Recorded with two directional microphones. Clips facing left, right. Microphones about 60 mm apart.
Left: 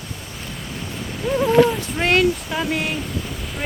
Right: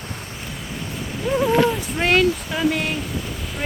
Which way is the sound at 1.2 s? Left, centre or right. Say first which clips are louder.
Left 2 dB; centre.